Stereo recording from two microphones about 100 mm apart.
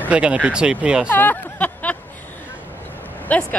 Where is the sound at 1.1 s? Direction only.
15° left (ahead or behind).